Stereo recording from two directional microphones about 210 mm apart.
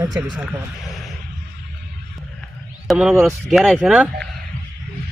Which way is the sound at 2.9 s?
Centre (ahead or behind).